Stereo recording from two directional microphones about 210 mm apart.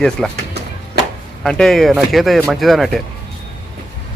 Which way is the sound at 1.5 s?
Centre (ahead or behind).